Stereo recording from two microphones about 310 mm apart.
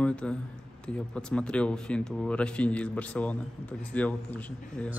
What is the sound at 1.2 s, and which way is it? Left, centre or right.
A woman's voice, centre.